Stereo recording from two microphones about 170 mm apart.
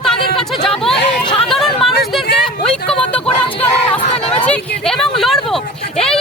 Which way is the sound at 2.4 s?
5° left (ahead or behind).